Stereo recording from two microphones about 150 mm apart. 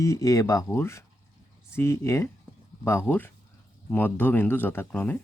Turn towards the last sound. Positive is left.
turn(degrees=10)  # may be behind; listen again after turning